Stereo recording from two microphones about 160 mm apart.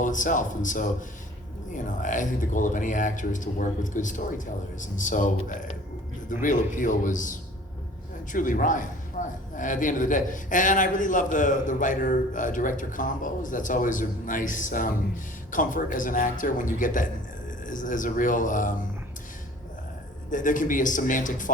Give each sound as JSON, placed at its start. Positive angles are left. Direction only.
{"t": 0.0, "sound": "a man's voice", "side_deg": 55}
{"t": 20.3, "sound": "a man's voice", "side_deg": 55}